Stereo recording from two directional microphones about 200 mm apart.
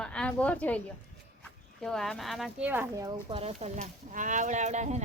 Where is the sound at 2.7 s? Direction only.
15° right (ahead or behind).